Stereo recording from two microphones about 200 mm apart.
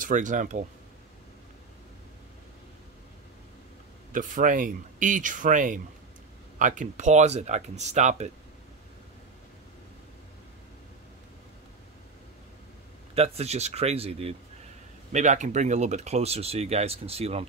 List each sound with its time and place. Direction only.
0.0 s speech: 40° right (ahead or behind)
4.1 s speech: 40° right (ahead or behind)
13.1 s speech: 30° right (ahead or behind)